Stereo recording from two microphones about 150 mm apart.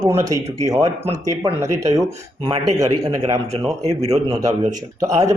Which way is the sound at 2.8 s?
20° right (ahead or behind).